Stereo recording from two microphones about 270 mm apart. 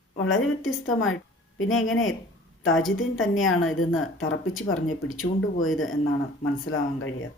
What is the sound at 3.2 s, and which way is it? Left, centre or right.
A woman's voice, left.